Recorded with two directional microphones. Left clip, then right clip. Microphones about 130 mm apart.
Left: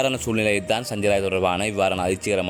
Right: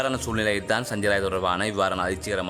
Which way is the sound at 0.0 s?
20° left (ahead or behind).